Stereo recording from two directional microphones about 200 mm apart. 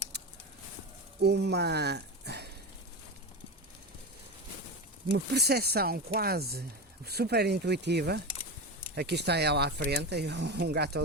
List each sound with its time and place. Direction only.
1.2 s speech: 55° right (ahead or behind)
5.1 s speech: 55° right (ahead or behind)